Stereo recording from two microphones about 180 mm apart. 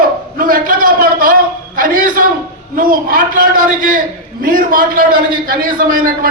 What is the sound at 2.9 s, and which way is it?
Speech, 50° right (ahead or behind).